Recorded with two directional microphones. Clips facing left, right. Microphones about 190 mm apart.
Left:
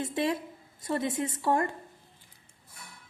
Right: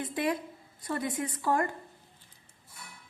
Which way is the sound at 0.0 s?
25° left (ahead or behind).